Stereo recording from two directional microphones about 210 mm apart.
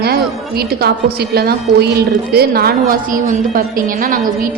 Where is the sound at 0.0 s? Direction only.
45° right (ahead or behind).